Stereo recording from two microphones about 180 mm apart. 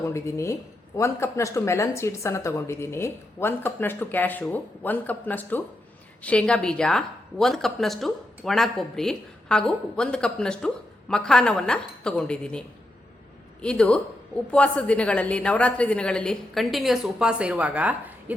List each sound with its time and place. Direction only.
0.1 s a woman's voice: 15° left (ahead or behind); by 18.3 s 10° right (ahead or behind)